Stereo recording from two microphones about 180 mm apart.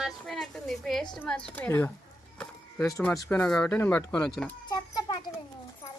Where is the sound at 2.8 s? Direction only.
15° left (ahead or behind).